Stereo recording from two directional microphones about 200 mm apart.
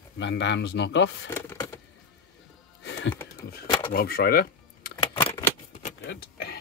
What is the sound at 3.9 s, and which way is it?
Speech, 50° left (ahead or behind).